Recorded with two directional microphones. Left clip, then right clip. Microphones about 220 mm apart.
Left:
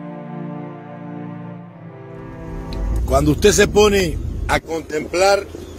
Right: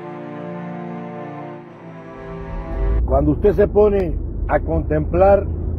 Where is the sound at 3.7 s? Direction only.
50° left (ahead or behind).